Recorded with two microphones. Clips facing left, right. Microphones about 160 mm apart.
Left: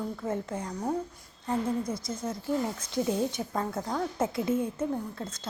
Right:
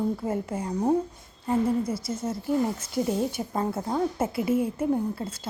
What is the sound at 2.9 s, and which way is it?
A woman's voice, 5° right (ahead or behind).